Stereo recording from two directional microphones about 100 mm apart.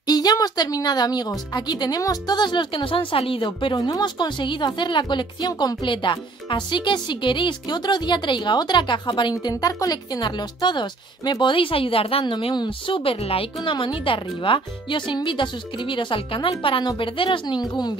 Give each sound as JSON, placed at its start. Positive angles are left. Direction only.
{"t": 0.0, "sound": "a woman's voice", "side_deg": 40}
{"t": 3.6, "sound": "a woman's voice", "side_deg": 50}
{"t": 17.6, "sound": "a woman's voice", "side_deg": 45}